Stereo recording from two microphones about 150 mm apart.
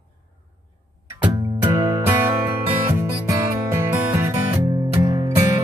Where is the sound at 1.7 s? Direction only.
25° right (ahead or behind).